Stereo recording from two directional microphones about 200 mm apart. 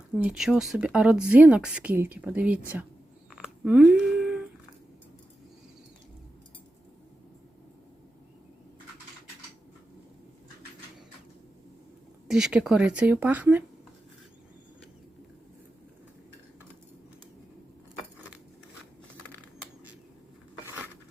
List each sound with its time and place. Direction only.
0.2 s speech: 5° right (ahead or behind)
3.3 s a sound: 5° right (ahead or behind)
12.3 s speech: 5° right (ahead or behind)